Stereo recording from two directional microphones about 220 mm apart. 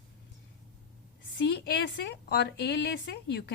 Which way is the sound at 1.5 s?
50° left (ahead or behind).